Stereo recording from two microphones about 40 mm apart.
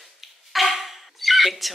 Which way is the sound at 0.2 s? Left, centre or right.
Centre.